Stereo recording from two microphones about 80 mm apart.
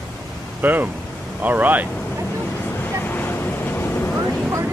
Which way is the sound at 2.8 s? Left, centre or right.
Left.